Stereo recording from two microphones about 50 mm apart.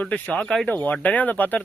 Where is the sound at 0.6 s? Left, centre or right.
Left.